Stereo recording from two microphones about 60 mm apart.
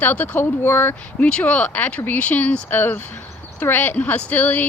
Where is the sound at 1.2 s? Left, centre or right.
Left.